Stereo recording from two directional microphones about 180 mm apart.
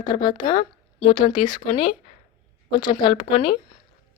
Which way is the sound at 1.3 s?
25° left (ahead or behind).